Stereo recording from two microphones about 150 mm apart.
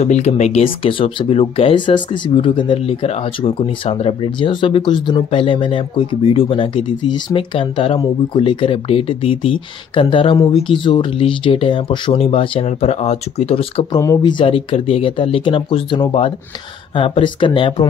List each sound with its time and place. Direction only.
0.0 s speech: 50° left (ahead or behind)
13.9 s speech: 25° left (ahead or behind)